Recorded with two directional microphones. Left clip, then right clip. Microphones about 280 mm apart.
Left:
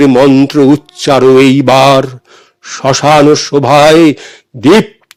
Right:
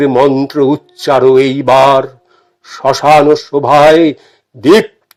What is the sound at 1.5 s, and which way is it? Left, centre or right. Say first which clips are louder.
Speech: left 1 dB; left.